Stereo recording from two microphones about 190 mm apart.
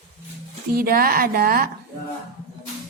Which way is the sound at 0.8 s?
50° right (ahead or behind).